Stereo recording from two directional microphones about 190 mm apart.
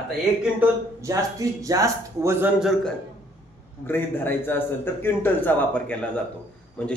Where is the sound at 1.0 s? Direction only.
15° right (ahead or behind).